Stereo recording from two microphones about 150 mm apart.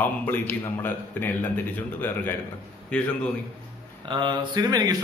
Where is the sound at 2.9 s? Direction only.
10° left (ahead or behind).